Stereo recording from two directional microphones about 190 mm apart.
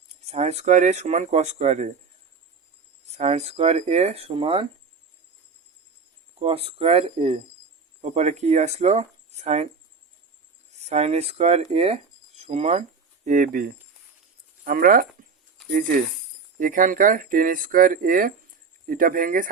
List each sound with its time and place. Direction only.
0.2 s speech: 35° right (ahead or behind)
3.1 s speech: 35° right (ahead or behind)
6.4 s speech: 30° right (ahead or behind)
10.7 s speech: 35° right (ahead or behind)
16.6 s speech: 45° right (ahead or behind)